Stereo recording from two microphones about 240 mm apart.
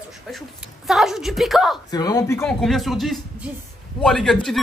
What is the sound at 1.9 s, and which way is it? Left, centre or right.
Speech, centre.